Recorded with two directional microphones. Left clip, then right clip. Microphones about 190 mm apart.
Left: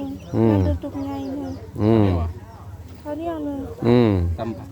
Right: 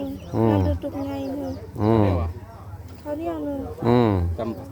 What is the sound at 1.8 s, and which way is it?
Speech, 40° left (ahead or behind).